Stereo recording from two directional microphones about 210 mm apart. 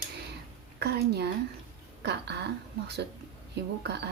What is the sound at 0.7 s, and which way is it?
Speech, 50° right (ahead or behind).